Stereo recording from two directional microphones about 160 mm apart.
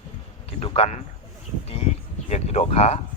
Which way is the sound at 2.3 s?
40° left (ahead or behind).